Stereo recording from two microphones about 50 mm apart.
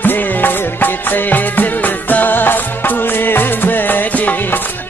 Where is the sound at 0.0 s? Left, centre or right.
Left.